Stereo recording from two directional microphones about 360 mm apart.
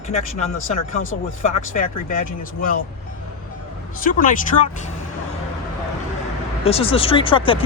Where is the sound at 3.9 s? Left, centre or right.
Left.